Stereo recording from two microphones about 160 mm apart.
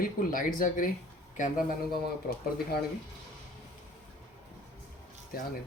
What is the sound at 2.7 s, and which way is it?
Speech, 85° left.